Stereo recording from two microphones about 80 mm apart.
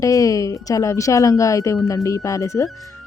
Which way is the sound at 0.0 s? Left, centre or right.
Left.